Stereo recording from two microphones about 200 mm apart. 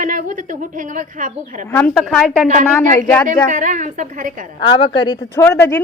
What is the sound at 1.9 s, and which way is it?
Speech, centre (ahead or behind).